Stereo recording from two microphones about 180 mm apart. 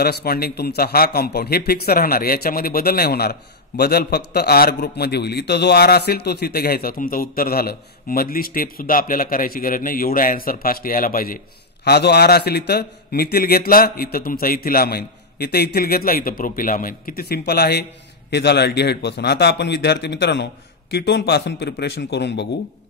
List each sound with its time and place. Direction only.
0.0 s a man's voice: 60° left (ahead or behind)
11.8 s a man's voice: 65° left (ahead or behind)